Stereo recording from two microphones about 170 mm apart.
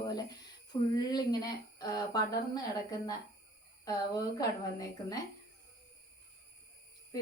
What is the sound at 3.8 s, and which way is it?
A woman's voice, 20° left (ahead or behind).